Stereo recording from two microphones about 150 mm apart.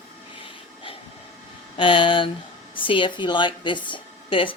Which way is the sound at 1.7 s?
35° left (ahead or behind).